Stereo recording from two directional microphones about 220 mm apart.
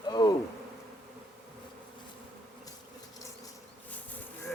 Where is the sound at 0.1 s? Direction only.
15° left (ahead or behind).